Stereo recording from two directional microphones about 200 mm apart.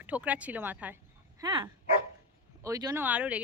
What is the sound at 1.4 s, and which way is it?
Speech, 25° right (ahead or behind).